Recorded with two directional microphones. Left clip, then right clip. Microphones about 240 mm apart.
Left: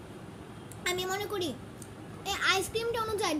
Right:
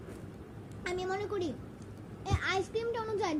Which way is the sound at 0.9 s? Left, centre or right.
Centre.